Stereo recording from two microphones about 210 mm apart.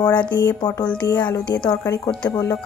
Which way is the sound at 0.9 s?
5° left (ahead or behind).